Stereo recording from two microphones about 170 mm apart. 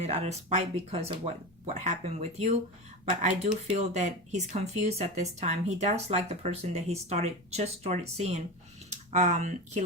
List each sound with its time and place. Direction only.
0.0 s speech: 40° right (ahead or behind)